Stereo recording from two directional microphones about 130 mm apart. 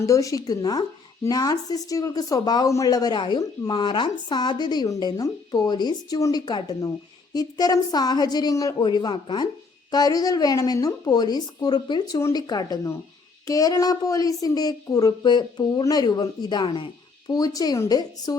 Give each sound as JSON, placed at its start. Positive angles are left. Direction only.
{"t": 0.0, "sound": "a woman's voice", "side_deg": 25}